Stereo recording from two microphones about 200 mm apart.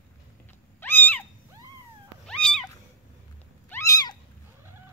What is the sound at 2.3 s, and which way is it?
Cat, 5° left (ahead or behind).